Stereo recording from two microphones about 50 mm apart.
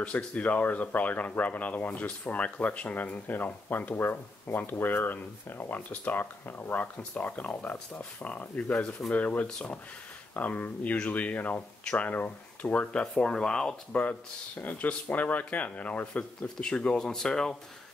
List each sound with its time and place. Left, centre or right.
0.0 s speech: left
3.9 s speech: left
11.8 s speech: centre
12.1 s speech: left
13.1 s speech: centre
13.9 s speech: left
16.5 s speech: centre